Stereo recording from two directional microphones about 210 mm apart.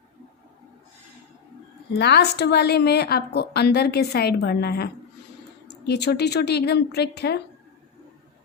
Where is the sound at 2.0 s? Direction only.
50° left (ahead or behind).